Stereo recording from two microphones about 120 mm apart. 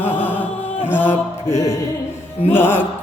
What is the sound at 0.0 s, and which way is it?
Music, 15° left (ahead or behind).